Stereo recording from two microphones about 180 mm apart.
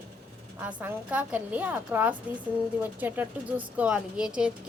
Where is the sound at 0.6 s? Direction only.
10° right (ahead or behind).